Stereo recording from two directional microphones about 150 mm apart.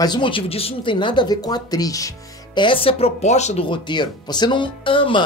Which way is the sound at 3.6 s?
30° left (ahead or behind).